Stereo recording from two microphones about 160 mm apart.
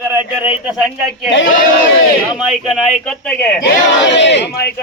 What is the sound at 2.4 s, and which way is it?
Speech, centre (ahead or behind).